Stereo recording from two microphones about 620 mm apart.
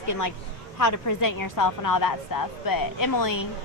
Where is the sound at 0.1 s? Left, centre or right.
Left.